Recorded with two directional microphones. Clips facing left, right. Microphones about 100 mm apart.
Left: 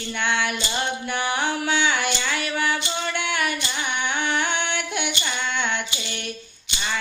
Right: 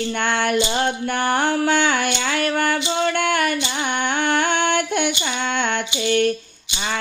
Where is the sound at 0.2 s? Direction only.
50° right (ahead or behind).